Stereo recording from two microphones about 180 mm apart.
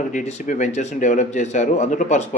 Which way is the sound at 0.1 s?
45° left (ahead or behind).